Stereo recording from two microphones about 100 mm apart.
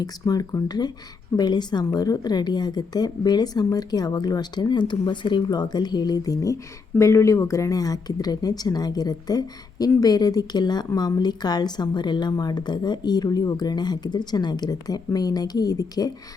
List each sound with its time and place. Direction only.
0.0 s a woman's voice: 40° left (ahead or behind)